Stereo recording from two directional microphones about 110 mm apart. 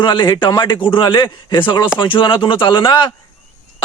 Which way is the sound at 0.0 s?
45° left (ahead or behind).